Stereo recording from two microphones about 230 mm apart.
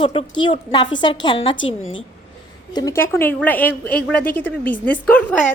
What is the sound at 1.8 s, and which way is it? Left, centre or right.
Speech, left.